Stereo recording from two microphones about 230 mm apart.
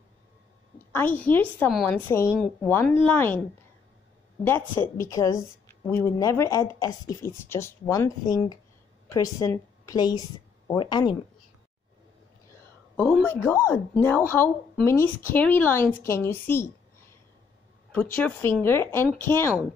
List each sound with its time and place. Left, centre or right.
0.9 s a woman's voice: centre
4.7 s speech: centre
12.9 s speech: centre
17.9 s speech: centre